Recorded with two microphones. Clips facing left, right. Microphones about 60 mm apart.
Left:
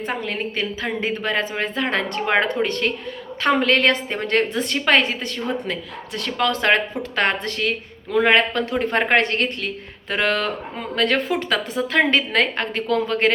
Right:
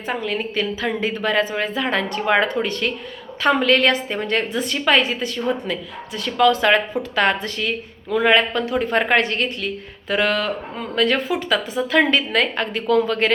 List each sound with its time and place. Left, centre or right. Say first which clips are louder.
0.2 s a woman's voice: right 2 dB; left
0.6 s a woman's voice: right 2 dB; left
11.8 s a woman's voice: right 1 dB; left